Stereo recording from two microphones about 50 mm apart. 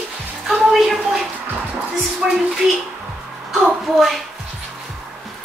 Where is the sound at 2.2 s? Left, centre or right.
Centre.